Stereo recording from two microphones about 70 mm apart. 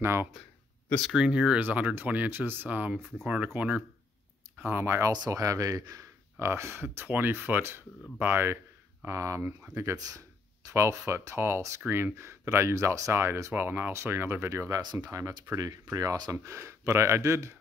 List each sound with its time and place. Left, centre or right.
0.0 s speech: right
1.1 s speech: centre
4.6 s speech: right
5.3 s speech: right
6.4 s speech: right
9.0 s speech: right
9.9 s speech: right
10.7 s speech: right
14.8 s speech: right
15.0 s speech: right